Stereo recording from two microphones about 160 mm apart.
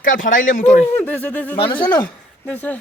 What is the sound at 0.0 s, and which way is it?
Speech, 55° left (ahead or behind).